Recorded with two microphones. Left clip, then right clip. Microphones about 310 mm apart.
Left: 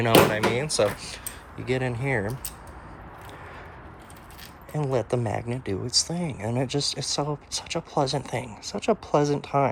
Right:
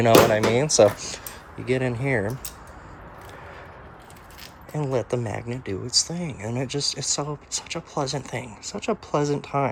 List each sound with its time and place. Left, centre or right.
0.0 s speech: centre
1.5 s speech: centre
4.7 s speech: centre